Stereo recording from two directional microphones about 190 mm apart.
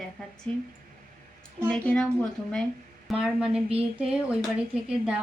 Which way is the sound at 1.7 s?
5° left (ahead or behind).